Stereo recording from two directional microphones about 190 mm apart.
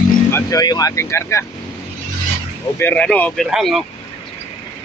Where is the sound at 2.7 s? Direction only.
10° left (ahead or behind).